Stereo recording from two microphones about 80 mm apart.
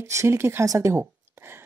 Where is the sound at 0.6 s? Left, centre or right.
Right.